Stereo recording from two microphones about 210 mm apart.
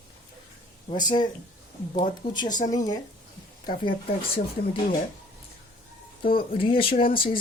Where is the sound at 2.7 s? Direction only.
15° left (ahead or behind).